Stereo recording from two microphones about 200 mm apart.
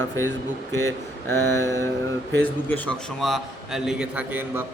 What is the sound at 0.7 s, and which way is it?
A man's voice, 15° left (ahead or behind).